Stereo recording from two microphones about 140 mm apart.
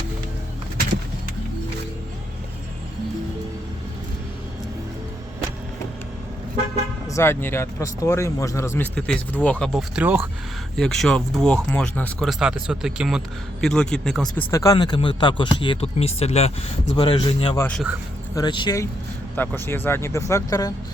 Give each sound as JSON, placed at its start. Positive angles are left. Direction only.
{"t": 7.1, "sound": "speech", "side_deg": 20}
{"t": 9.0, "sound": "speech", "side_deg": 10}
{"t": 9.7, "sound": "speech", "side_deg": -10}
{"t": 10.8, "sound": "a man's voice", "side_deg": 5}
{"t": 12.3, "sound": "a man's voice", "side_deg": -5}
{"t": 14.5, "sound": "speech", "side_deg": 25}
{"t": 17.0, "sound": "speech", "side_deg": 35}
{"t": 19.4, "sound": "speech", "side_deg": 15}